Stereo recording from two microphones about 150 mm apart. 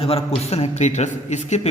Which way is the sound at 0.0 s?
40° left (ahead or behind).